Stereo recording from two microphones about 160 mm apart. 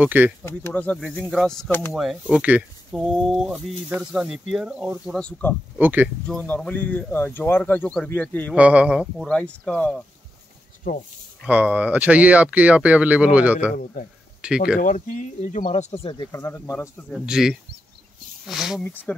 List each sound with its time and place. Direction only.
0.0 s speech: 10° right (ahead or behind)
0.5 s speech: 15° left (ahead or behind)
2.3 s speech: 10° right (ahead or behind)
5.2 s speech: 10° left (ahead or behind)
5.8 s speech: 10° right (ahead or behind)
6.2 s speech: 10° left (ahead or behind)
8.5 s speech: 10° right (ahead or behind)
10.9 s speech: 70° left (ahead or behind)
11.4 s speech: 10° right (ahead or behind)
14.8 s speech: 55° left (ahead or behind); by 16.3 s 35° left (ahead or behind)
16.3 s speech: 15° left (ahead or behind)
17.1 s speech: 5° right (ahead or behind)
18.9 s speech: 10° left (ahead or behind)